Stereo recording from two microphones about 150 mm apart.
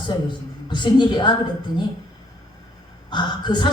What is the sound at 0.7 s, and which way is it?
Speech, 30° left (ahead or behind).